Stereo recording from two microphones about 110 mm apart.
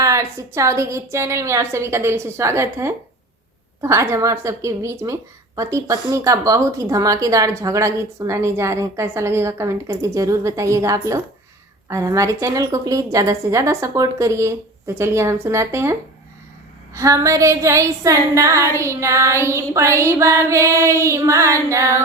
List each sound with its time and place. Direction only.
0.0 s a woman's voice: 30° right (ahead or behind)